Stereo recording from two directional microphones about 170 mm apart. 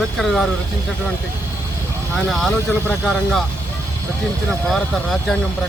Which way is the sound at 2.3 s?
Centre (ahead or behind).